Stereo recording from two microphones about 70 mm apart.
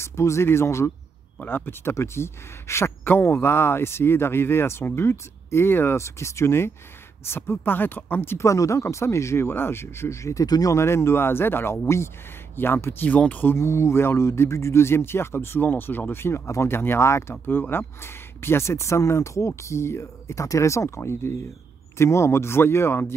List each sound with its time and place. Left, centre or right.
0.0 s a man's voice: left
1.4 s a man's voice: left
8.4 s a man's voice: left
10.4 s speech: left
10.7 s a man's voice: left
13.6 s a man's voice: left